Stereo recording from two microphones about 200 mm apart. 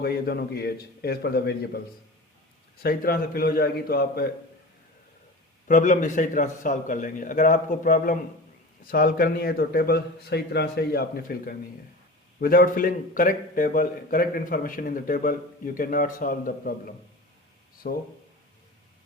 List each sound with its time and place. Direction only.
0.0 s a man's voice: 50° left (ahead or behind)
2.8 s a man's voice: 50° left (ahead or behind)
5.6 s a man's voice: 40° left (ahead or behind)